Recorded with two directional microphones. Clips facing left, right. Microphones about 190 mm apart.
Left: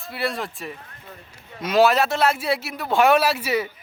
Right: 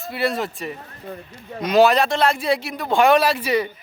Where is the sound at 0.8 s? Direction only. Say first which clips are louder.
Right 8 dB; 40° right (ahead or behind).